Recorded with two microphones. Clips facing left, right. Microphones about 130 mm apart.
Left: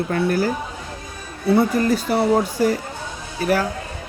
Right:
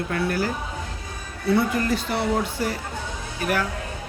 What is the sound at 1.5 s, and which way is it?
Speech, 35° left (ahead or behind).